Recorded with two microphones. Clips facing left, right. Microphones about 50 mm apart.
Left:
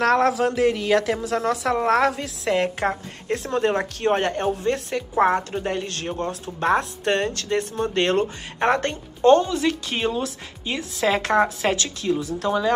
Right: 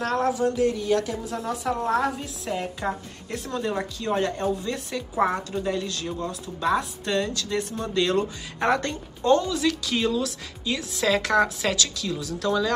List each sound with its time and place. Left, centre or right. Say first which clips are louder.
0.0 s a woman's voice: left 5 dB; left
2.9 s a woman's voice: left 4 dB; left
3.6 s a woman's voice: left 7 dB; left